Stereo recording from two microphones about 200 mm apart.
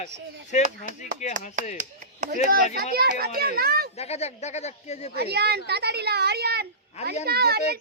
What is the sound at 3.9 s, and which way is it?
Speech, 30° left (ahead or behind).